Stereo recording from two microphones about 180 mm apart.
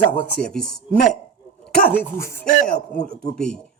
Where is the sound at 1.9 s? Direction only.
15° left (ahead or behind).